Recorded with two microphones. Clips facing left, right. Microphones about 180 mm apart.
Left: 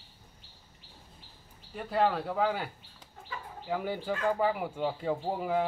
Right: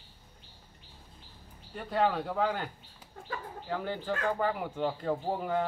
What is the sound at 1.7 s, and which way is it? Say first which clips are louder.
Speech: left 1 dB; centre (ahead or behind).